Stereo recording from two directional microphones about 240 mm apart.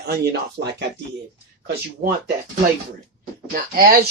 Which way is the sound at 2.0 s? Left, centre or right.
Right.